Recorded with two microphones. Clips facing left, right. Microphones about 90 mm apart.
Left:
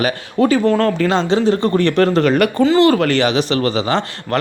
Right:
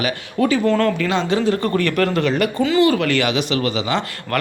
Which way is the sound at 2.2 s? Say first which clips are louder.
Left 5 dB; 60° left (ahead or behind).